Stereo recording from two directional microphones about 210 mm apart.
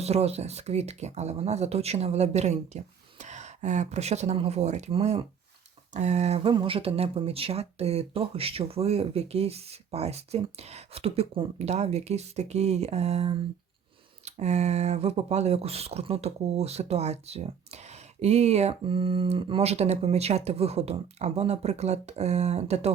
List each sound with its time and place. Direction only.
0.0 s speech: 30° right (ahead or behind)